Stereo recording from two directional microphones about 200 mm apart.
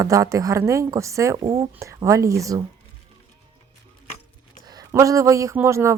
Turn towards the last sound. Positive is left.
turn(degrees=-15)  # may be behind; listen again after turning